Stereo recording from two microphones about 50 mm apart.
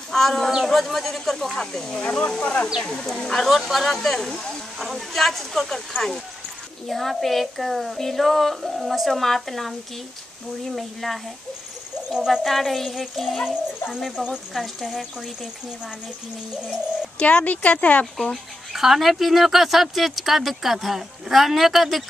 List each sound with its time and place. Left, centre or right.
0.1 s speech: centre
2.8 s speech: centre
12.3 s speech: centre
14.1 s speech: centre
14.5 s speech: centre
17.2 s speech: left
18.7 s speech: centre